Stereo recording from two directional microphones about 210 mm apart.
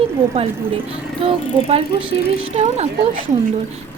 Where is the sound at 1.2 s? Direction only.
25° right (ahead or behind).